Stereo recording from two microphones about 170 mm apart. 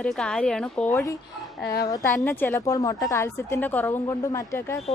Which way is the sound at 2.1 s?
10° left (ahead or behind).